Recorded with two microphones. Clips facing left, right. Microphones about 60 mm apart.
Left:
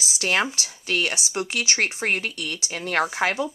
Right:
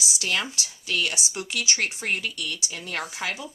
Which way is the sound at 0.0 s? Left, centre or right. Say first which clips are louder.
Left 5 dB; left.